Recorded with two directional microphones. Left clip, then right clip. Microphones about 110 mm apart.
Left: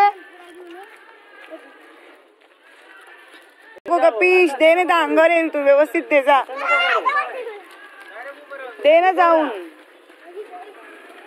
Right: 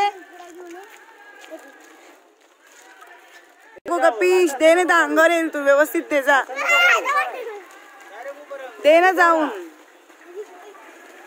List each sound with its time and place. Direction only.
3.8 s a man's voice: centre (ahead or behind)
6.5 s children playing: 35° left (ahead or behind)
8.8 s a man's voice: 20° right (ahead or behind)